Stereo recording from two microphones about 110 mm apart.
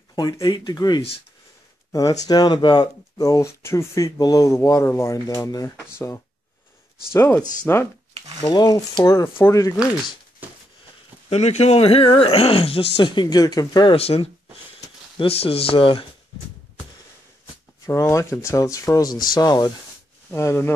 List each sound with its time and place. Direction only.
0.1 s speech: 35° left (ahead or behind); by 7.9 s 20° left (ahead or behind)
8.5 s speech: 35° left (ahead or behind)
10.4 s a sound: 15° right (ahead or behind)
11.2 s speech: 75° left (ahead or behind); by 13.9 s 35° left (ahead or behind)
13.9 s speech: 65° left (ahead or behind)
17.8 s speech: 30° left (ahead or behind)
20.2 s speech: 25° left (ahead or behind)